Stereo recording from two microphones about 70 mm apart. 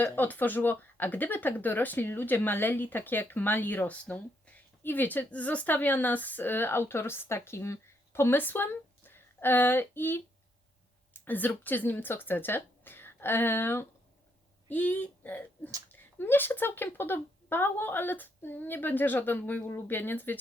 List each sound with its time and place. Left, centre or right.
0.0 s speech: left
4.8 s speech: left
14.7 s speech: left